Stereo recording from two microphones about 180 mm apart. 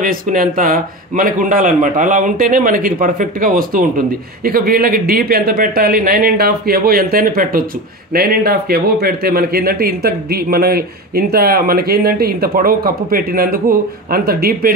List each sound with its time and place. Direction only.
0.0 s a man's voice: 50° right (ahead or behind)